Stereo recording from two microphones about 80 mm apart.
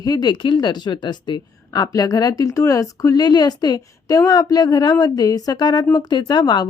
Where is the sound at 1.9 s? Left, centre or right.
Left.